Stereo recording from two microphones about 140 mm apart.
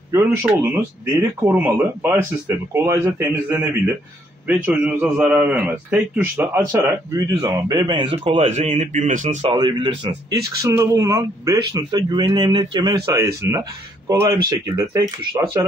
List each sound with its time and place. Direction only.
0.1 s a man's voice: 20° right (ahead or behind); by 9.4 s 60° right (ahead or behind)
9.4 s a man's voice: 40° right (ahead or behind)
13.1 s speech: 20° right (ahead or behind)